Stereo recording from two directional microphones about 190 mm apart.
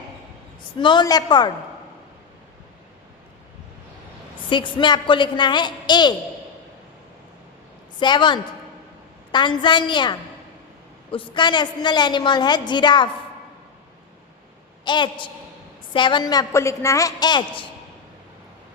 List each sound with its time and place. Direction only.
0.8 s a woman's voice: 25° left (ahead or behind)
4.4 s a woman's voice: 25° left (ahead or behind)
7.9 s a woman's voice: 25° left (ahead or behind)
14.8 s a woman's voice: 25° left (ahead or behind)